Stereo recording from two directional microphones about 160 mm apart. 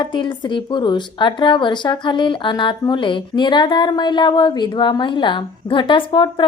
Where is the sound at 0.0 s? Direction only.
30° left (ahead or behind).